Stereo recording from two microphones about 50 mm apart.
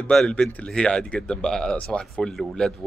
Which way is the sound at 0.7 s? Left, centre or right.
Centre.